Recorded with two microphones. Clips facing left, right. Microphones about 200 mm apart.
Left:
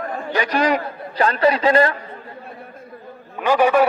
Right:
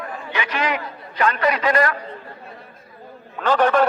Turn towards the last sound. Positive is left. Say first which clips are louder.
# left 2 dB
turn(degrees=10)  # may be behind; listen again after turning